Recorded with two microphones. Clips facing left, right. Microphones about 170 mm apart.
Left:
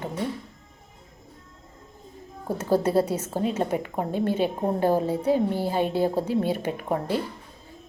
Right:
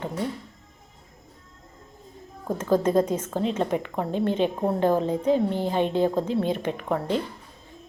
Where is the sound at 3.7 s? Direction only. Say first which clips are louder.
Even; 45° left (ahead or behind).